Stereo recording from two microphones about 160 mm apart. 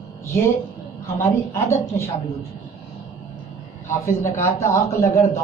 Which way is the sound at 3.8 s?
15° left (ahead or behind).